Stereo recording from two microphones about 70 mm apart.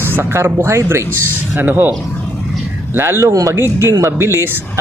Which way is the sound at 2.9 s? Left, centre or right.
Right.